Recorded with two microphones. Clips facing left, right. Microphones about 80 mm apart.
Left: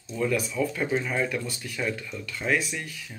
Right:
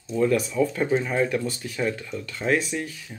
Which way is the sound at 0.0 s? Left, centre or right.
Right.